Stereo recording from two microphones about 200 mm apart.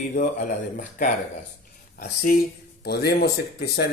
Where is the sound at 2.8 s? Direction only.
55° left (ahead or behind).